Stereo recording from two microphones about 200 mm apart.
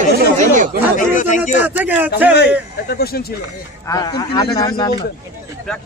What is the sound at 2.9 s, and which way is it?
Speech, 50° left (ahead or behind).